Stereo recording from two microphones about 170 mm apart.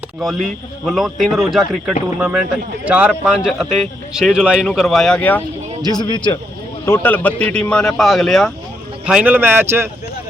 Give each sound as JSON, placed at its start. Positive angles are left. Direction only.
{"t": 0.9, "sound": "a man's voice", "side_deg": 0}
{"t": 5.9, "sound": "speech", "side_deg": 25}
{"t": 6.8, "sound": "a man's voice", "side_deg": 15}